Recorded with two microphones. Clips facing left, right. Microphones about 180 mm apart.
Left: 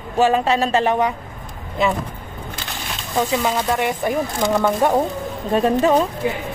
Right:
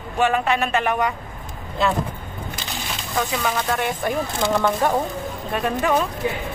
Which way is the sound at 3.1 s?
20° left (ahead or behind).